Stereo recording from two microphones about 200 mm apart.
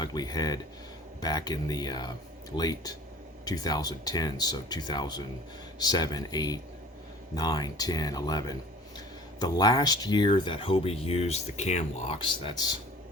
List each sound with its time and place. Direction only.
0.0 s speech: 20° left (ahead or behind)